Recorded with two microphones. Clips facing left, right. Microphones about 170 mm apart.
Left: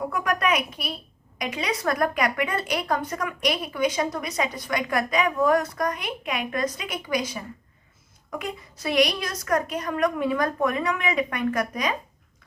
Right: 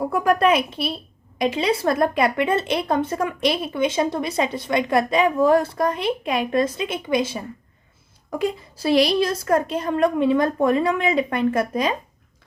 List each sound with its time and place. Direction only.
0.0 s speech: 30° right (ahead or behind)